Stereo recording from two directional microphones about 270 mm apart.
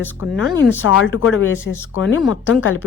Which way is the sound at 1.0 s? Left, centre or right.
Left.